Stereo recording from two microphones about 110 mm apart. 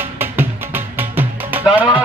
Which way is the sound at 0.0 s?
20° right (ahead or behind).